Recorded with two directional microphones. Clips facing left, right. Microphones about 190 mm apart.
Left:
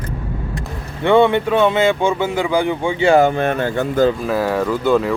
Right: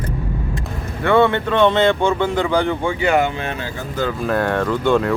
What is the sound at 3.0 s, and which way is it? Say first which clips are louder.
Speech: left 6 dB; 30° left (ahead or behind).